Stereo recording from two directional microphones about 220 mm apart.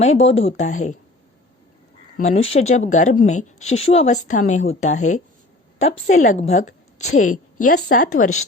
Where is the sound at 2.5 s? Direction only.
30° left (ahead or behind).